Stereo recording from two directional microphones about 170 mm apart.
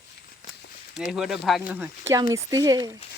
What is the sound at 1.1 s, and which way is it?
Speech, 5° right (ahead or behind).